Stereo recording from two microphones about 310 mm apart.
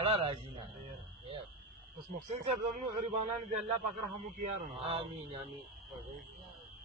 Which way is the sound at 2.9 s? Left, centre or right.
Right.